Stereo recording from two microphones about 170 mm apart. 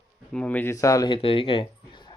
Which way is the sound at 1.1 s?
35° left (ahead or behind).